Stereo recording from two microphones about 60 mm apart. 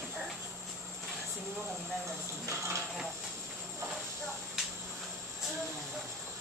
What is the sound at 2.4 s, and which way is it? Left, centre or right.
Speech, right.